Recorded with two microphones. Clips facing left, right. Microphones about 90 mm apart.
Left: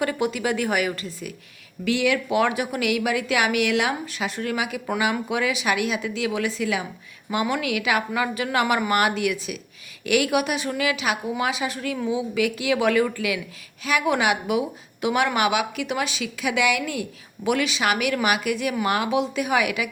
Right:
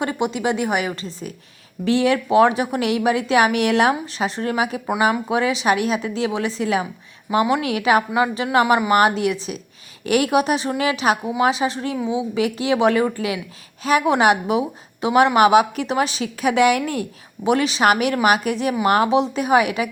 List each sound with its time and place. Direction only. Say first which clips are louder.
0.0 s a woman's voice: right 2 dB; 25° right (ahead or behind)